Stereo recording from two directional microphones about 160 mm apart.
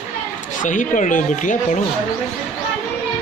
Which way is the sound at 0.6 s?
50° left (ahead or behind).